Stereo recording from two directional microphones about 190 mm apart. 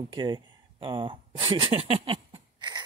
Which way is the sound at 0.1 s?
25° right (ahead or behind).